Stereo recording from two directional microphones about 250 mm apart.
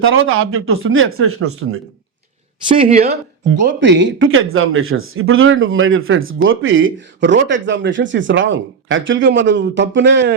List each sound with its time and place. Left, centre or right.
0.0 s speech: right
2.6 s speech: right
3.6 s speech: right